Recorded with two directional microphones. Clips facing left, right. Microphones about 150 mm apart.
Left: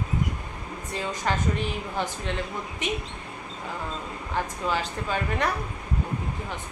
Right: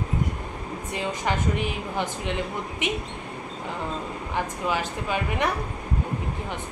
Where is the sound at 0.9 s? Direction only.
15° right (ahead or behind).